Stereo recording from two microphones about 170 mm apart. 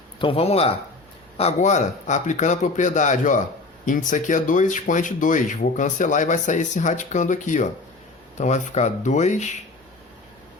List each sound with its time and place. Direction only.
0.2 s speech: 35° left (ahead or behind)